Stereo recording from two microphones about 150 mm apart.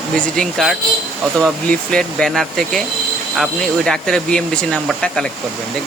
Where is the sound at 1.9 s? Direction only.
5° left (ahead or behind).